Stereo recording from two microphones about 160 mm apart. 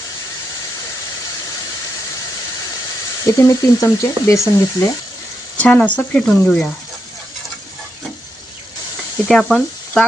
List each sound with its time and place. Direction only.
3.2 s speech: 20° left (ahead or behind)
5.5 s speech: 10° left (ahead or behind)
9.3 s speech: centre (ahead or behind)